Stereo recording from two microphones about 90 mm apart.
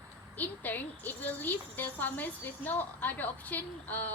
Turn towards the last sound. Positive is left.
turn(degrees=20)  # may be behind; listen again after turning